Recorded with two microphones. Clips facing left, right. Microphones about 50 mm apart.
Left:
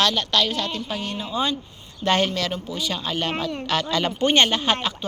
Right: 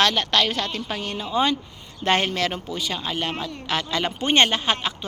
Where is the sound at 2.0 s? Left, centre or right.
Right.